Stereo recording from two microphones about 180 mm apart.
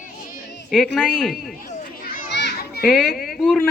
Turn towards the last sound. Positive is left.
turn(degrees=0)  # may be behind; listen again after turning